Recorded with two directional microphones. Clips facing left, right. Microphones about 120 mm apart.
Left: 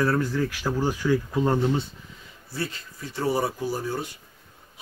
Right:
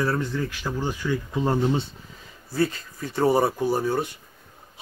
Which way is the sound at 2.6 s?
55° right (ahead or behind).